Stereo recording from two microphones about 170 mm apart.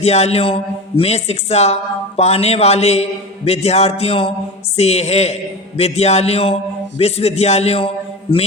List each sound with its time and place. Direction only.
0.0 s a man's voice: 40° left (ahead or behind)